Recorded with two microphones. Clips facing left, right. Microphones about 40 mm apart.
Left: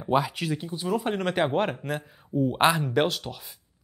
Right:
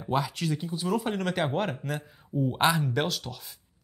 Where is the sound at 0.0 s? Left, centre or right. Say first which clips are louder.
Left 4 dB; centre.